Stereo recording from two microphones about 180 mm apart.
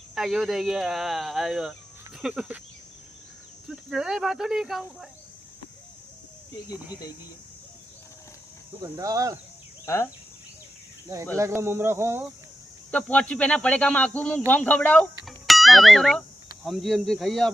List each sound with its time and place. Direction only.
0.1 s speech: 5° right (ahead or behind)
3.7 s speech: 5° right (ahead or behind)
8.8 s speech: 20° right (ahead or behind)
9.8 s speech: 15° left (ahead or behind)
11.3 s speech: 15° right (ahead or behind)
12.9 s speech: 10° left (ahead or behind)
15.2 s music: centre (ahead or behind)
16.6 s speech: centre (ahead or behind)